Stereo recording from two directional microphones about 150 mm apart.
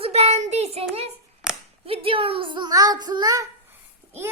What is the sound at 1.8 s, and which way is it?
Speech, 40° right (ahead or behind).